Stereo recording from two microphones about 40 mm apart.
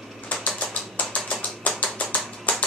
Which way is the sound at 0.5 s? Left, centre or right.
Left.